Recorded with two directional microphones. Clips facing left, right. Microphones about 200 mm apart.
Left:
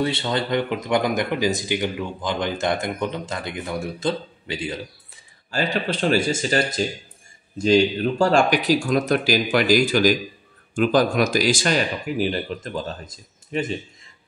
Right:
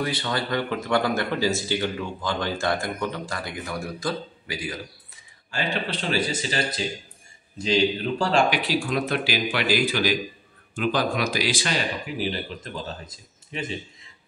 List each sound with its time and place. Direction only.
0.0 s speech: 25° left (ahead or behind)
5.5 s speech: 40° left (ahead or behind)